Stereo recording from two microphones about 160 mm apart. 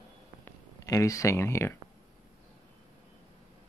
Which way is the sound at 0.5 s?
20° left (ahead or behind).